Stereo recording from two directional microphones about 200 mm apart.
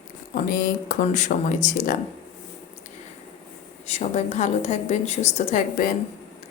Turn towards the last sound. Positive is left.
turn(degrees=40)  # may be behind; listen again after turning